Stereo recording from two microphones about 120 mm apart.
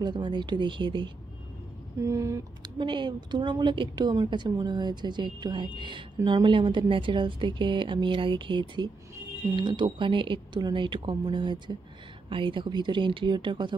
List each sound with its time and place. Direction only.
0.0 s a woman's voice: 40° right (ahead or behind)
2.0 s speech: 25° right (ahead or behind)
2.8 s a woman's voice: 40° right (ahead or behind)